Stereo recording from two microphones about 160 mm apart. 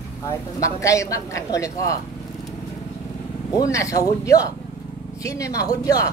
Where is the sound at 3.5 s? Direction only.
20° left (ahead or behind).